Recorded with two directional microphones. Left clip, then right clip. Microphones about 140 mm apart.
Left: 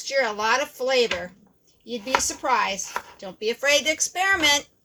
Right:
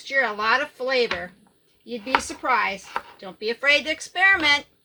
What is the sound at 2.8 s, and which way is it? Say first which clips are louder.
Chopping: even; centre (ahead or behind).